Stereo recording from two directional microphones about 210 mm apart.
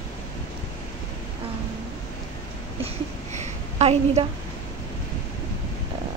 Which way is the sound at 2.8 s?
30° right (ahead or behind).